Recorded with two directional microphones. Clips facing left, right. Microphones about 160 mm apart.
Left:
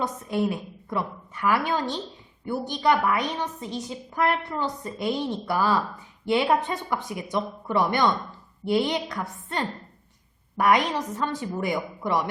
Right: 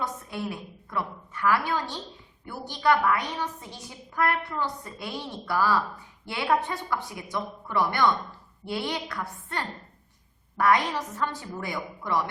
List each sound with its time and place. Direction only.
0.0 s a woman's voice: 20° left (ahead or behind)